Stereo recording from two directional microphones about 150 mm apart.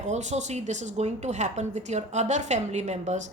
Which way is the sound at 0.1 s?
50° right (ahead or behind).